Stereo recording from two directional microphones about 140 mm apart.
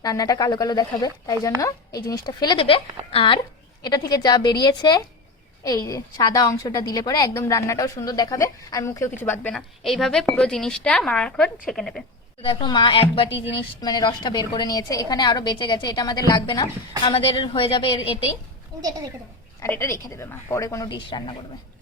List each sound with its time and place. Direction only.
0.0 s a woman's voice: 25° left (ahead or behind)
3.8 s a woman's voice: 30° left (ahead or behind)
9.6 s speech: centre (ahead or behind)
12.5 s a woman's voice: 35° left (ahead or behind)
19.6 s a woman's voice: 20° left (ahead or behind)
20.9 s a woman's voice: 35° left (ahead or behind)